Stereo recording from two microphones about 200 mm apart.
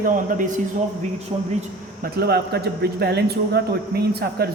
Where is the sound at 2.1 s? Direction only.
50° right (ahead or behind).